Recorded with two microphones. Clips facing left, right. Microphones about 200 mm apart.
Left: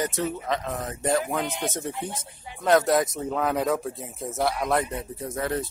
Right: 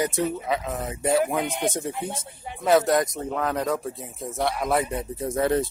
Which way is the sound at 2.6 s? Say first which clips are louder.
Right 1 dB; centre (ahead or behind).